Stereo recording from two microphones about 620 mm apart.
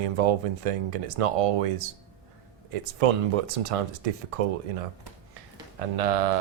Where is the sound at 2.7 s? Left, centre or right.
Right.